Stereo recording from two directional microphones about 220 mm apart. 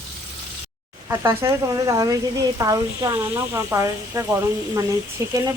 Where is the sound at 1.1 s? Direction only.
10° right (ahead or behind).